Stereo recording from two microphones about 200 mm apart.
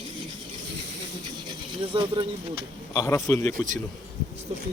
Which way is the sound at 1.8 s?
25° right (ahead or behind).